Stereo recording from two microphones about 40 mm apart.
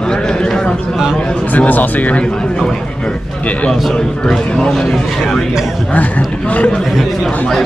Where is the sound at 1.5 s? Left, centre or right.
Left.